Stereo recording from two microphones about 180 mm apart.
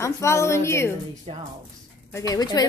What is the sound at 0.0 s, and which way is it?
Speech, 15° left (ahead or behind).